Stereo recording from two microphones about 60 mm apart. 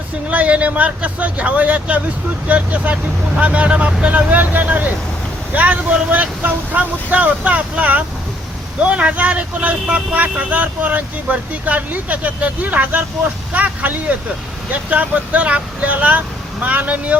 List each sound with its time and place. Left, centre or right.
0.3 s speech: right